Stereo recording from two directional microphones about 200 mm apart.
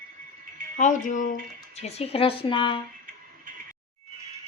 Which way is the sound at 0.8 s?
40° left (ahead or behind).